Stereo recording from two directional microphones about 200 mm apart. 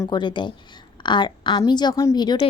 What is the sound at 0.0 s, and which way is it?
A woman's voice, 20° left (ahead or behind).